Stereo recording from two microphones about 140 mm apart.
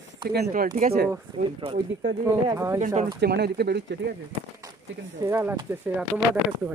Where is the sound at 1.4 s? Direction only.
50° right (ahead or behind).